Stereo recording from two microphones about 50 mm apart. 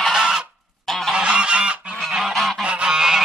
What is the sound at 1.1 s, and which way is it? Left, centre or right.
Goose, centre.